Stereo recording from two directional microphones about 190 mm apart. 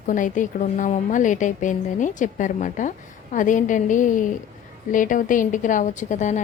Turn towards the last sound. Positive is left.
turn(degrees=40)  # may be behind; listen again after turning